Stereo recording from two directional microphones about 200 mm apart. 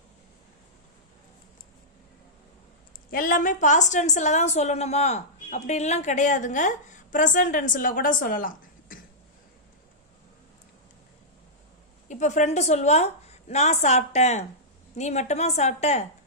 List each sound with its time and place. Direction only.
3.1 s a woman's voice: 45° left (ahead or behind)
12.0 s a woman's voice: 35° left (ahead or behind)